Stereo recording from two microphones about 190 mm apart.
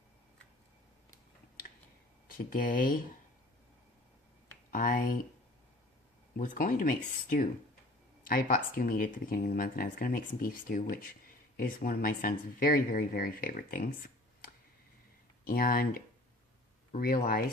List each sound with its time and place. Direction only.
2.2 s speech: 45° left (ahead or behind)
4.7 s speech: 45° left (ahead or behind)
6.3 s speech: 45° left (ahead or behind)